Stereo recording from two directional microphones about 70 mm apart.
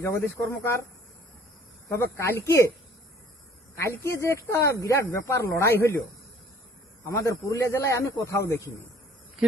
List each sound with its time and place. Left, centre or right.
0.0 s speech: left
2.0 s a man's voice: left
3.8 s speech: left
7.0 s a man's voice: left